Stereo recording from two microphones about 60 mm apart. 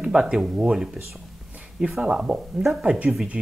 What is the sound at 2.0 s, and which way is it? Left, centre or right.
Speech, centre.